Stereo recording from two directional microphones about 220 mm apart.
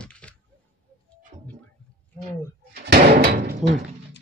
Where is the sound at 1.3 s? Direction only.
20° right (ahead or behind).